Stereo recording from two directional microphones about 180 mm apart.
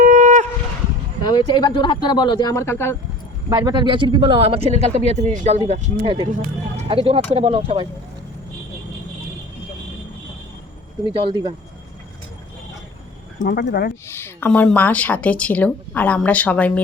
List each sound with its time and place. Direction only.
0.0 s shofar: 45° right (ahead or behind)
1.2 s speech: 25° left (ahead or behind)
3.5 s speech: 25° right (ahead or behind)
11.1 s speech: 30° right (ahead or behind)
13.4 s speech: 55° left (ahead or behind)
14.1 s speech: 10° left (ahead or behind)